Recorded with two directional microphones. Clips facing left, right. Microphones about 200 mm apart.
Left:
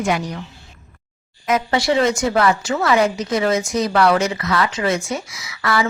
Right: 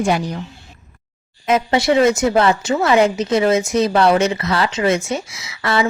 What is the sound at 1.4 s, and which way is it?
Speech, 25° right (ahead or behind).